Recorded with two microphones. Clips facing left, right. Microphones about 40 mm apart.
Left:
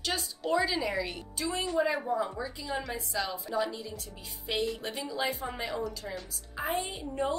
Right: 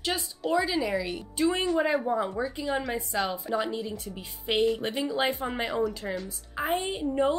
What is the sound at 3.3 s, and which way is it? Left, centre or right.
A woman's voice, right.